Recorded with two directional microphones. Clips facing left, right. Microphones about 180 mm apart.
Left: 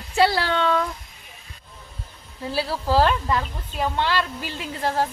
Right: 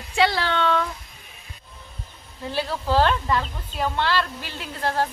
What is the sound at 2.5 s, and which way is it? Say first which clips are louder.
Speech: left 1 dB; 5° left (ahead or behind).